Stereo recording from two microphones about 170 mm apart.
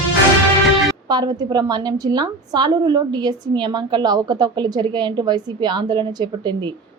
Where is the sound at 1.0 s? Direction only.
25° right (ahead or behind).